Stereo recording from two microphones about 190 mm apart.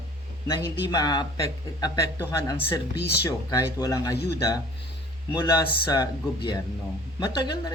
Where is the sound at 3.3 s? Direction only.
15° left (ahead or behind).